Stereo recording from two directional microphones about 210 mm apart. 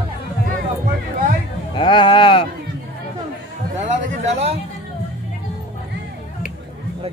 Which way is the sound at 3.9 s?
35° right (ahead or behind).